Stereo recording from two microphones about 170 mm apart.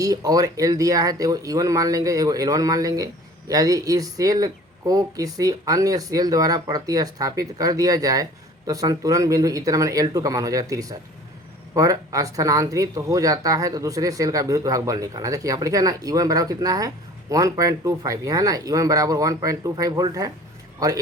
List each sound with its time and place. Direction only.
0.0 s a man's voice: 20° right (ahead or behind)